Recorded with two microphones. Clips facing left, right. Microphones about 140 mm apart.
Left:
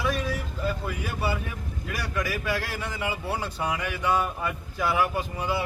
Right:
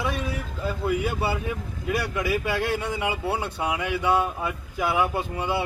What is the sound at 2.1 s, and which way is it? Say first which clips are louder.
A man's voice: left 1 dB; 20° right (ahead or behind).